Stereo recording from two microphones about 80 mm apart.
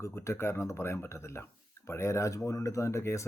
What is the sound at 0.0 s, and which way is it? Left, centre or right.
Speech, left.